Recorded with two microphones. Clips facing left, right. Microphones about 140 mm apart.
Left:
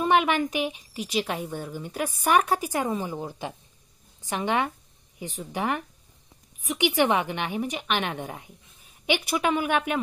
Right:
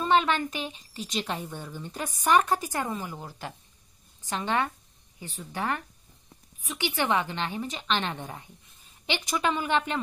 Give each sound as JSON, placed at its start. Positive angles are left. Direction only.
{"t": 0.0, "sound": "a woman's voice", "side_deg": 15}